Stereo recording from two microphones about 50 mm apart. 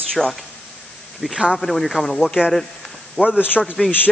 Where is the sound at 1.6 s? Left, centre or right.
Centre.